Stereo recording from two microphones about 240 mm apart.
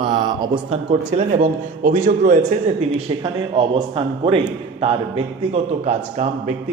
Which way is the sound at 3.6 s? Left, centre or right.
Centre.